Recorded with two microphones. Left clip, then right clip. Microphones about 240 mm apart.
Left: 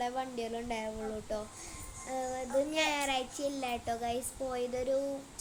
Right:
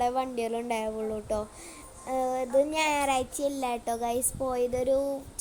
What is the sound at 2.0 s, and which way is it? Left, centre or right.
A woman's voice, right.